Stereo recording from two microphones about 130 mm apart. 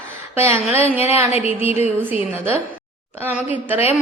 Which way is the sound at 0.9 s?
55° left (ahead or behind).